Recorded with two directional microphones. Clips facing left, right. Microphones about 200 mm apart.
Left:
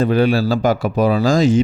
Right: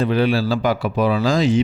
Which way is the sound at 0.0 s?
45° left (ahead or behind).